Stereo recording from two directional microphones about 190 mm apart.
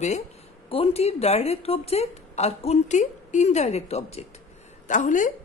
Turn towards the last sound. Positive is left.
turn(degrees=45)  # may be behind; listen again after turning